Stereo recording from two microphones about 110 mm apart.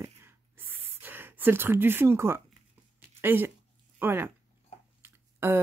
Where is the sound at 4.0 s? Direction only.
20° right (ahead or behind).